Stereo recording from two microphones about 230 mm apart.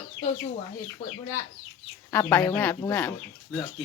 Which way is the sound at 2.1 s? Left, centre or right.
Centre.